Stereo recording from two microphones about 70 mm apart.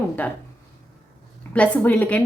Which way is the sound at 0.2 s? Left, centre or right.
Left.